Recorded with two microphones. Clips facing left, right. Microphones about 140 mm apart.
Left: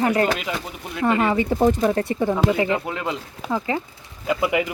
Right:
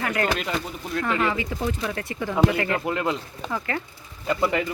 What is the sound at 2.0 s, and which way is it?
Speech, 30° left (ahead or behind).